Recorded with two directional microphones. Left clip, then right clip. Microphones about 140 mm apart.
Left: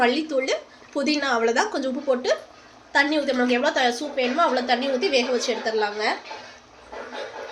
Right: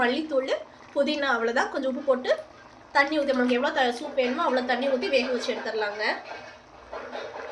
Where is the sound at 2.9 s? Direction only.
65° left (ahead or behind).